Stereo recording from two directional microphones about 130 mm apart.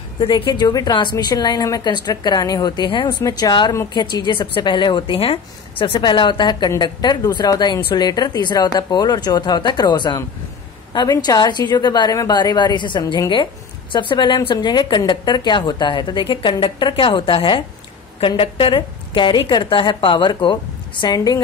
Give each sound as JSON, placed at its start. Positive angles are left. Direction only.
{"t": 0.2, "sound": "a woman's voice", "side_deg": 40}